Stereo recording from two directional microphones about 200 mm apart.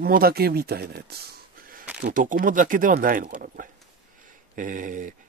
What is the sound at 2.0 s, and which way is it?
Speech, 40° right (ahead or behind).